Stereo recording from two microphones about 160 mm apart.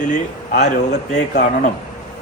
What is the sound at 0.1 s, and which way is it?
Speech, 50° left (ahead or behind).